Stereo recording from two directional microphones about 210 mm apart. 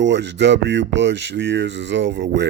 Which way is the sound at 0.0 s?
55° right (ahead or behind).